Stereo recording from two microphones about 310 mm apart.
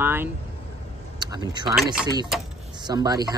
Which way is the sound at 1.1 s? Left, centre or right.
Centre.